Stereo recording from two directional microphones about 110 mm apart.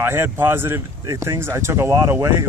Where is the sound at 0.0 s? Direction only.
20° right (ahead or behind).